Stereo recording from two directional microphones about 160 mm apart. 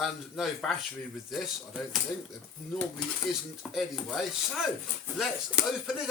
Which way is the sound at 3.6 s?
Centre (ahead or behind).